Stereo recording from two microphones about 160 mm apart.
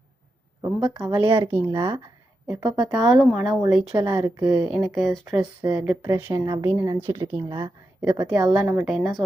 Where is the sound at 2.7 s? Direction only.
Centre (ahead or behind).